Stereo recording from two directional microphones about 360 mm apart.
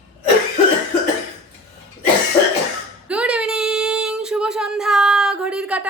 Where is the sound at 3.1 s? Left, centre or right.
Centre.